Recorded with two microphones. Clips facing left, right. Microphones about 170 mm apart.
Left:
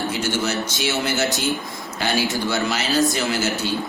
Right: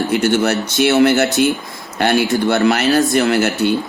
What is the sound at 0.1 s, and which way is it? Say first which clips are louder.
A man's voice: right 8 dB; 65° right (ahead or behind).